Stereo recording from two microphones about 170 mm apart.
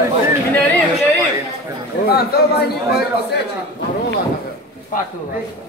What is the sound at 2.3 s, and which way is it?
Speech, 65° left (ahead or behind).